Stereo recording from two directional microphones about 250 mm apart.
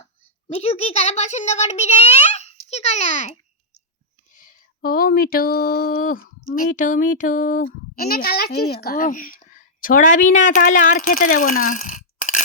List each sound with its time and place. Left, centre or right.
0.4 s a child's voice: left
4.4 s speech: left